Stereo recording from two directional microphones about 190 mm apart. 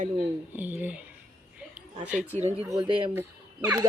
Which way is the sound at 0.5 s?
10° right (ahead or behind).